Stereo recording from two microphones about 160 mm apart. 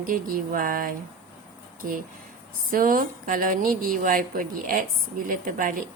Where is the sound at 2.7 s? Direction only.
60° right (ahead or behind).